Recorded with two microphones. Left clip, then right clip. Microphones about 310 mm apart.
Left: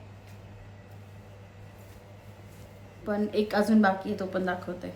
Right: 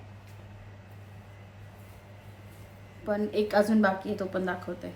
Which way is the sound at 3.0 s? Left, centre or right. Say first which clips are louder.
Even; centre.